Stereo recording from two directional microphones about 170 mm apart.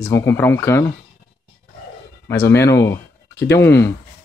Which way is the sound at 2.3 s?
15° left (ahead or behind).